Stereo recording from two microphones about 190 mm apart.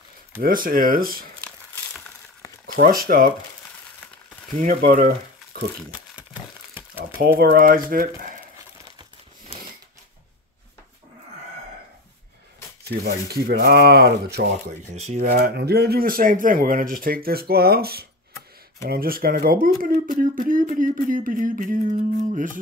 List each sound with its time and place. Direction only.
0.4 s speech: 50° right (ahead or behind)
2.6 s a sound: 45° right (ahead or behind)
3.1 s speech: 50° right (ahead or behind)
4.6 s speech: 45° right (ahead or behind)
7.2 s speech: 50° right (ahead or behind)
12.8 s speech: 55° right (ahead or behind)
14.9 s speech: 35° right (ahead or behind)
15.3 s speech: 55° right (ahead or behind); by 22.5 s 40° right (ahead or behind)